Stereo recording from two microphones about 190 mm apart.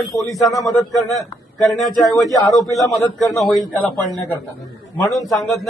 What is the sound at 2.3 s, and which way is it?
Speech, 15° left (ahead or behind).